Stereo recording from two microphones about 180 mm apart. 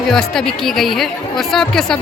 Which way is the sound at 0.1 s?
Centre (ahead or behind).